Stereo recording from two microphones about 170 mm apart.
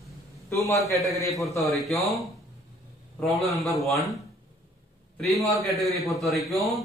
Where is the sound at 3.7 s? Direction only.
Centre (ahead or behind).